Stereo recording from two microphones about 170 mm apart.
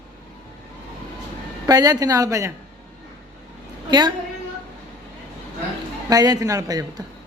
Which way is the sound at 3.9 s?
25° right (ahead or behind).